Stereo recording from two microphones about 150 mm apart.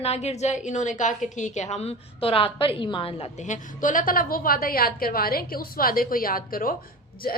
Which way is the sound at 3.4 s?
60° left (ahead or behind).